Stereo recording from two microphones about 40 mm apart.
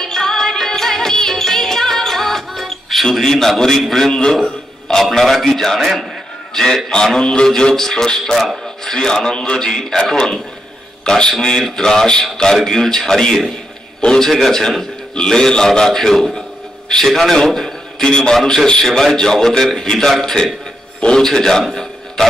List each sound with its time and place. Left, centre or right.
0.0 s music: centre
4.1 s a man's voice: centre
5.1 s a man's voice: centre
14.0 s a man's voice: centre
21.0 s a man's voice: left